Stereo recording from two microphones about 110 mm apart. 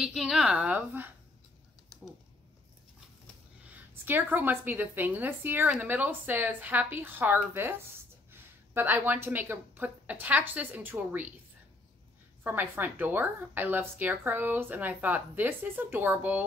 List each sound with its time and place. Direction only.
0.0 s a woman's voice: 5° right (ahead or behind)
1.9 s typing: centre (ahead or behind)
3.9 s a woman's voice: 20° right (ahead or behind)
12.4 s a woman's voice: 20° right (ahead or behind)